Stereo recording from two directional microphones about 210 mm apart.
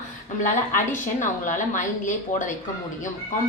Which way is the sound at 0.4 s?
35° left (ahead or behind).